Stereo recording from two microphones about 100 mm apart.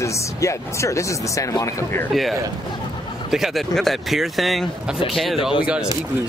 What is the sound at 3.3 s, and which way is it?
Speech, centre (ahead or behind).